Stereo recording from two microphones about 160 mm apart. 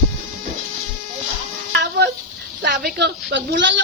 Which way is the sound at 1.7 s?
90° right.